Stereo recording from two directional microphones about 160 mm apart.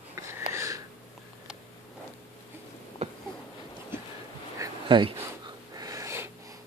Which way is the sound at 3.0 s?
45° right (ahead or behind).